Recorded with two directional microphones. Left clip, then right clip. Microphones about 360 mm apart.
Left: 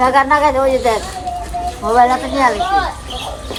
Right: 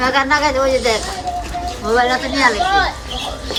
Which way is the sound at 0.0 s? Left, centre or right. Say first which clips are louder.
Left 3 dB; centre.